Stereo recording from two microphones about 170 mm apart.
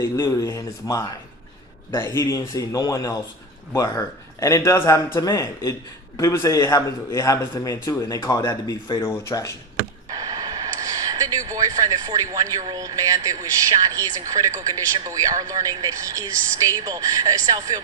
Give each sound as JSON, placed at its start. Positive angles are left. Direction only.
{"t": 0.0, "sound": "a man's voice", "side_deg": 15}
{"t": 10.1, "sound": "speech", "side_deg": -20}